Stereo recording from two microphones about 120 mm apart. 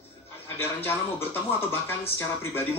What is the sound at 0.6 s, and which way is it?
Speech, 20° left (ahead or behind).